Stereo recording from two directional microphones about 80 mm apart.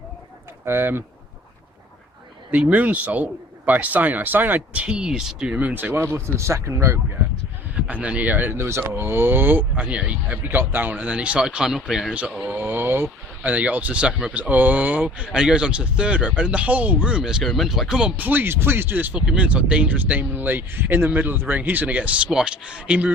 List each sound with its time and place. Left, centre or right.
0.6 s speech: right
2.5 s speech: centre; by 7.0 s right
7.8 s speech: centre
12.5 s speech: right; by 18.1 s centre
18.2 s speech: right